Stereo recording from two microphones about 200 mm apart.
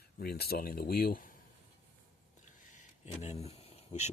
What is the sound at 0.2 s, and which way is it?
Speech, 50° left (ahead or behind).